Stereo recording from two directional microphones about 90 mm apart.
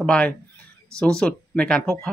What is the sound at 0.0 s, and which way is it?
Speech, 10° left (ahead or behind).